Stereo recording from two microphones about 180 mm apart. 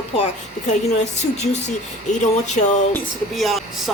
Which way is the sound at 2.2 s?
40° left (ahead or behind).